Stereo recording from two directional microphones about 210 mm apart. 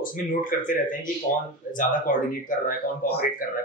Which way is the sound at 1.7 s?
40° left (ahead or behind).